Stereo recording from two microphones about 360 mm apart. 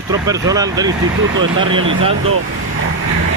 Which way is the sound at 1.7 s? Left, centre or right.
Right.